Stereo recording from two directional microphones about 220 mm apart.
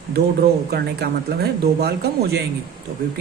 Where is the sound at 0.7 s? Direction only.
45° right (ahead or behind).